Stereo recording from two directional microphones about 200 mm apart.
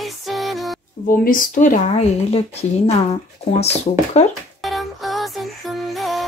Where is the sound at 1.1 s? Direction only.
45° left (ahead or behind).